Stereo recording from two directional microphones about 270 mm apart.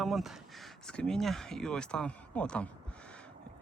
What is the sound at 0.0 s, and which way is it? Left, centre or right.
Speech, centre.